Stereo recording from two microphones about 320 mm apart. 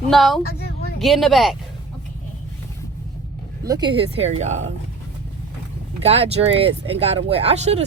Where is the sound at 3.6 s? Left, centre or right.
Centre.